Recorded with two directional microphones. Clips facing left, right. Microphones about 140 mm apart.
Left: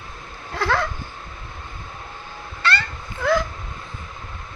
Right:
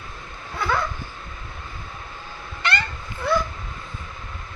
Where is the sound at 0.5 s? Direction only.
90° left.